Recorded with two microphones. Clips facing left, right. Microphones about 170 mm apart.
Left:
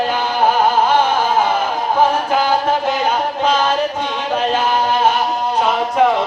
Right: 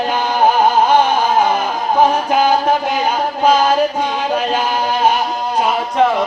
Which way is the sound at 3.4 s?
10° right (ahead or behind).